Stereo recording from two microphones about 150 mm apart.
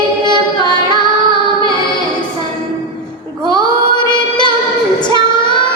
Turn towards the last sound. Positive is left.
turn(degrees=30)  # may be behind; listen again after turning